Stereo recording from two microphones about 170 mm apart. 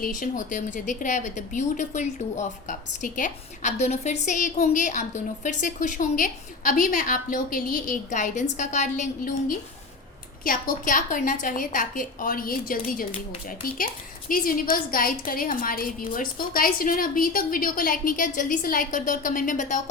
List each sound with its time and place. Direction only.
0.0 s a woman's voice: 50° left (ahead or behind)